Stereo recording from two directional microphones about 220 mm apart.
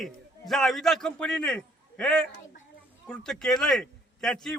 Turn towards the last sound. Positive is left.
turn(degrees=0)  # may be behind; listen again after turning